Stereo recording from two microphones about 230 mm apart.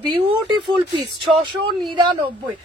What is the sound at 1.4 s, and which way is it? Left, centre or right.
Speech, right.